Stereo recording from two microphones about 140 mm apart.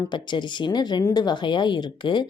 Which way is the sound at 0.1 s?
35° left (ahead or behind).